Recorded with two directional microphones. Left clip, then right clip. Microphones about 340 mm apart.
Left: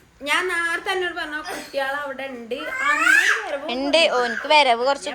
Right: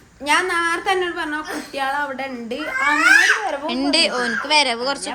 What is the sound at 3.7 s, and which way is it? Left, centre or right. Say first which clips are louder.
Speech: left 2 dB; centre.